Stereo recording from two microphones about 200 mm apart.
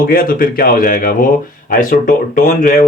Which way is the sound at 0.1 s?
45° left (ahead or behind).